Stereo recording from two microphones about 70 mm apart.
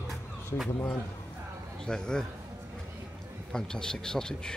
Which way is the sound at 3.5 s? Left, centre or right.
Centre.